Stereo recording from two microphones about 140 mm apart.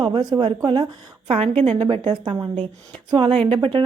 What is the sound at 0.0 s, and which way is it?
Speech, 30° right (ahead or behind).